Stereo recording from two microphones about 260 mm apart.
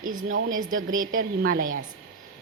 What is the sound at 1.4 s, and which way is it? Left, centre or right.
Speech, right.